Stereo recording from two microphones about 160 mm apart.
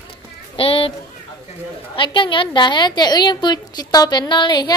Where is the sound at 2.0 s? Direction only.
30° left (ahead or behind).